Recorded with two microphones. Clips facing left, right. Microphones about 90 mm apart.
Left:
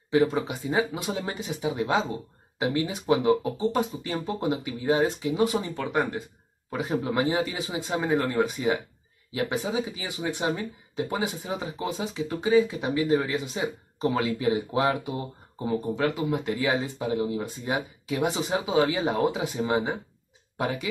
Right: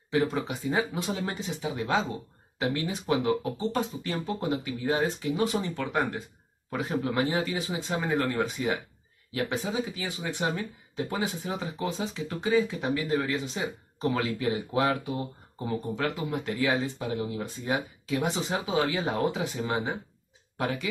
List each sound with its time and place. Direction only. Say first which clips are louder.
0.1 s speech: left 4 dB; 15° left (ahead or behind)